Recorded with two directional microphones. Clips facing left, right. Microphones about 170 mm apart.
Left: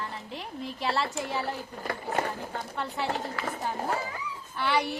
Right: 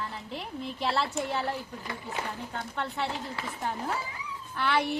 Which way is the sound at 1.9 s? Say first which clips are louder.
Left 7 dB; 50° left (ahead or behind).